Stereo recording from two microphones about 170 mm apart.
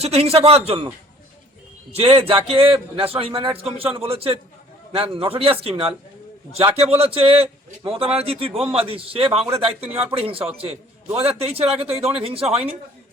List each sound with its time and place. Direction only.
0.0 s a man's voice: 35° right (ahead or behind)
1.9 s a man's voice: 35° right (ahead or behind)